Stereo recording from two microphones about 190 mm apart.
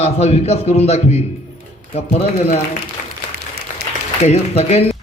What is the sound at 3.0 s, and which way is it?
Applause, 45° left (ahead or behind).